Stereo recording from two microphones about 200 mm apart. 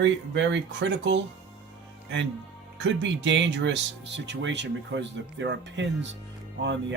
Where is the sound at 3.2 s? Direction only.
65° right (ahead or behind).